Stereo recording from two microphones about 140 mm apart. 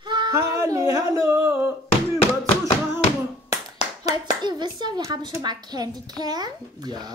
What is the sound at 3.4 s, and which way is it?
A child's voice, 25° right (ahead or behind).